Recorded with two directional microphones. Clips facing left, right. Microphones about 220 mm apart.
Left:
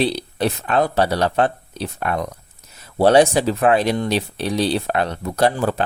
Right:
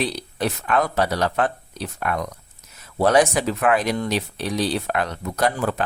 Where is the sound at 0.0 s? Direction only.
30° left (ahead or behind).